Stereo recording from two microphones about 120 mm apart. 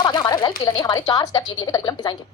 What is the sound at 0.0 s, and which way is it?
Speech, 30° left (ahead or behind).